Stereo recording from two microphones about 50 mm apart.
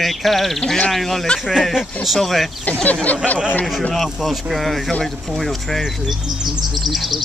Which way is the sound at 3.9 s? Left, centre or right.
Centre.